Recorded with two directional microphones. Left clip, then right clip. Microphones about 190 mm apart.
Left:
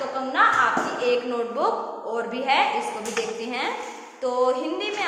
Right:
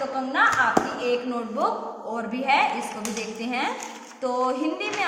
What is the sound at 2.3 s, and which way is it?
Speech, 25° right (ahead or behind).